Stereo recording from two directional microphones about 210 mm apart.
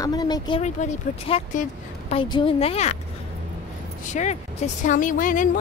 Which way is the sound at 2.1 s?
25° left (ahead or behind).